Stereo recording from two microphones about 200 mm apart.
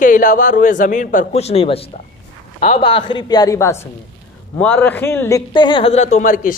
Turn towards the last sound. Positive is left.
turn(degrees=40)  # may be behind; listen again after turning